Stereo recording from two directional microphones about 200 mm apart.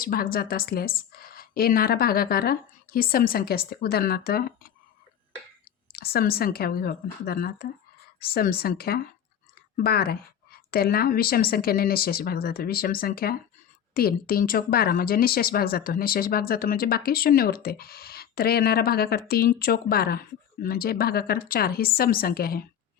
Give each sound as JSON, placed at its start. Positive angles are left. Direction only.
{"t": 0.0, "sound": "speech", "side_deg": 45}
{"t": 5.9, "sound": "speech", "side_deg": 50}